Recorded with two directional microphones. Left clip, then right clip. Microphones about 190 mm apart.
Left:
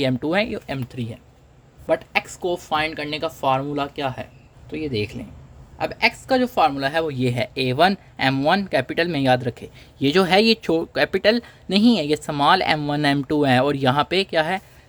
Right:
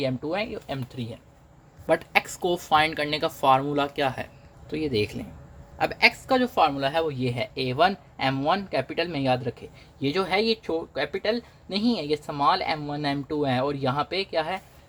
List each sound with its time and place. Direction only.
0.0 s speech: 40° left (ahead or behind)
1.9 s speech: centre (ahead or behind)
6.2 s speech: 20° left (ahead or behind); by 14.6 s 35° left (ahead or behind)